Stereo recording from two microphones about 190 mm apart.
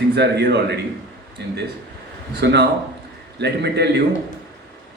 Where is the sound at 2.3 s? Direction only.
60° right (ahead or behind).